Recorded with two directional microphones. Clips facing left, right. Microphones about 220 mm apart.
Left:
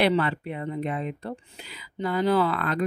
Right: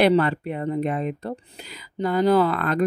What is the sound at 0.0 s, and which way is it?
Speech, 45° right (ahead or behind).